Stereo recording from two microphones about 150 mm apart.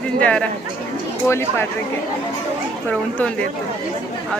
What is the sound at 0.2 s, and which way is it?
Speech, 10° left (ahead or behind).